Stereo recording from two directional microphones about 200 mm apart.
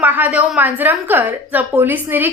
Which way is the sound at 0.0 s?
10° right (ahead or behind).